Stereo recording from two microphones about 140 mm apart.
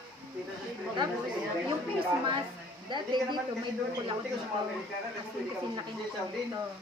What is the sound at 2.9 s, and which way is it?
Speech, 35° right (ahead or behind).